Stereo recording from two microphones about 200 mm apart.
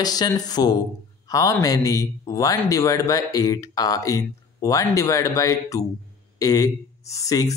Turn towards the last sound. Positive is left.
turn(degrees=15)  # may be behind; listen again after turning